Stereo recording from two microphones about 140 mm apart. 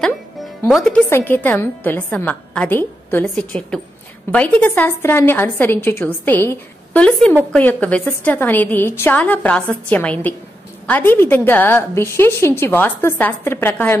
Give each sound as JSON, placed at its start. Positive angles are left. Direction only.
{"t": 0.7, "sound": "speech", "side_deg": 0}
{"t": 1.1, "sound": "a woman's voice", "side_deg": 15}